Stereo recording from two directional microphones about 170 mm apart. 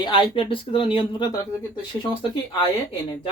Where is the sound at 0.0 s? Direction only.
30° left (ahead or behind).